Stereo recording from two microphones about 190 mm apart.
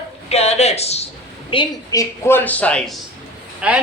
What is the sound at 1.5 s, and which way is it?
A man's voice, 20° left (ahead or behind).